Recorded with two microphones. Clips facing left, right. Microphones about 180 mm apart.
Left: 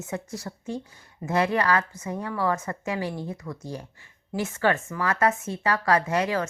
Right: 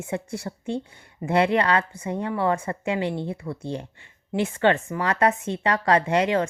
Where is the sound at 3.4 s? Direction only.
20° right (ahead or behind).